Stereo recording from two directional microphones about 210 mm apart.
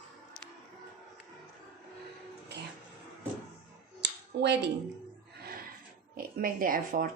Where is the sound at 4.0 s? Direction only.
55° right (ahead or behind).